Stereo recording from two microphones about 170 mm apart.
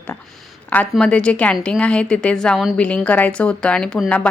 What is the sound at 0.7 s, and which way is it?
A woman's voice, 5° left (ahead or behind).